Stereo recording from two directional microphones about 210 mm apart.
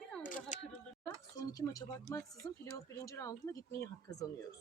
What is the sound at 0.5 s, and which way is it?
Speech, 35° left (ahead or behind).